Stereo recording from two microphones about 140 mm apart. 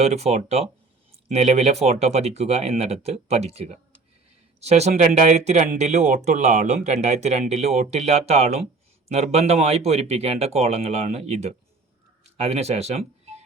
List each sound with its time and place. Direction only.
0.0 s speech: 50° right (ahead or behind)